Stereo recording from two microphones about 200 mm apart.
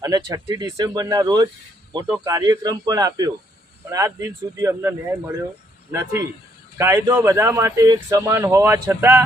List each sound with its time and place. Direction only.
0.0 s speech: 20° right (ahead or behind)